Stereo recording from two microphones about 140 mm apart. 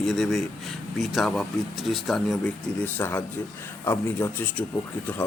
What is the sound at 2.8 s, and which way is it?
Speech, 15° left (ahead or behind).